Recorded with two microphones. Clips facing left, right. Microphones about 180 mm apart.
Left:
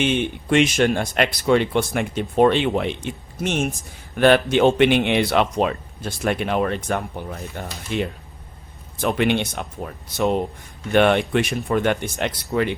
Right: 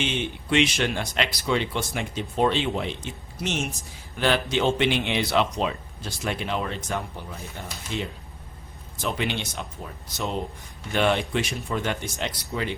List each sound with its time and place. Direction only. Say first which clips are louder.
0.0 s speech: left 7 dB; 55° left (ahead or behind)
9.0 s speech: left 8 dB; 55° left (ahead or behind)